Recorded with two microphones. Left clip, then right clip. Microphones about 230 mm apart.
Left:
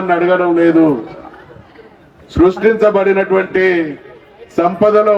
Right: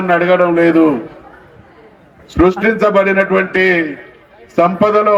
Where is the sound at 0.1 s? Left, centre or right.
Right.